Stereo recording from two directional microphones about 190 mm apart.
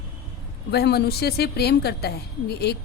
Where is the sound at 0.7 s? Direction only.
60° left (ahead or behind).